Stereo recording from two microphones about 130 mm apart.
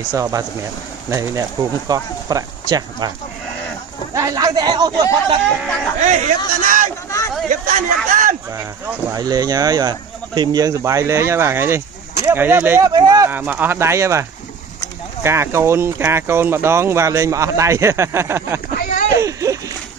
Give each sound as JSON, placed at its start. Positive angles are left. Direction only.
{"t": 0.1, "sound": "speech", "side_deg": -25}
{"t": 4.1, "sound": "speech", "side_deg": -25}
{"t": 6.0, "sound": "a man's voice", "side_deg": -80}
{"t": 9.1, "sound": "speech", "side_deg": -30}
{"t": 12.8, "sound": "speech", "side_deg": -30}
{"t": 13.3, "sound": "speech", "side_deg": -15}
{"t": 15.2, "sound": "speech", "side_deg": -20}
{"t": 18.8, "sound": "a sound", "side_deg": 90}
{"t": 19.1, "sound": "a sound", "side_deg": -25}